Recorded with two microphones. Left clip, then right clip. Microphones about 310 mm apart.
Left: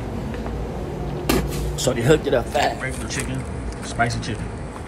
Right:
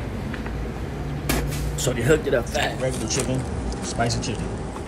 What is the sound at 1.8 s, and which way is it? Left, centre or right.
Speech, centre.